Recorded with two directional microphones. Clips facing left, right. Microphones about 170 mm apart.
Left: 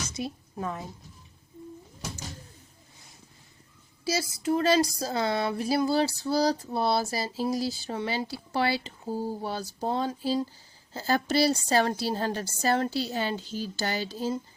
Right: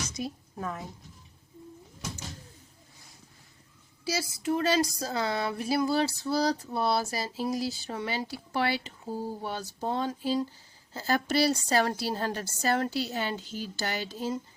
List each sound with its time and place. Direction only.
0.2 s a woman's voice: 20° left (ahead or behind)
4.1 s a sound: 40° left (ahead or behind)
10.9 s a woman's voice: 30° left (ahead or behind)